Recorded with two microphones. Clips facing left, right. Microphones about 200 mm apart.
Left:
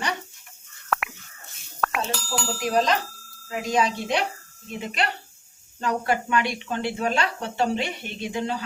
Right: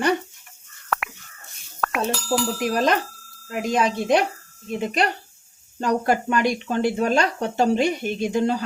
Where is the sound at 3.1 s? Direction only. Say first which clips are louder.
Right 1 dB; centre (ahead or behind).